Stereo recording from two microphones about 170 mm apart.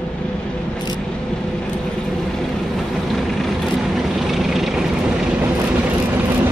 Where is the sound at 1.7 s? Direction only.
Centre (ahead or behind).